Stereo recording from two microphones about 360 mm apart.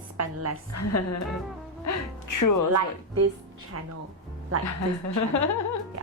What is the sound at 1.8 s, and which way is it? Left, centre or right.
Speech, left.